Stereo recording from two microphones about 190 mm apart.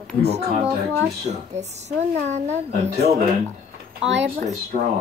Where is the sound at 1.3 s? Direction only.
35° right (ahead or behind).